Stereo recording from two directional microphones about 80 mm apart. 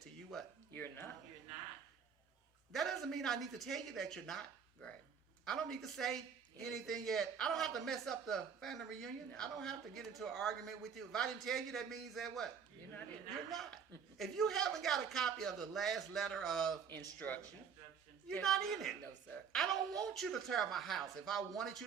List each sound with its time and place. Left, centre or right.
0.0 s a sound: centre
0.7 s speech: left
2.7 s speech: centre
13.5 s speech: centre
16.9 s speech: left
18.4 s speech: centre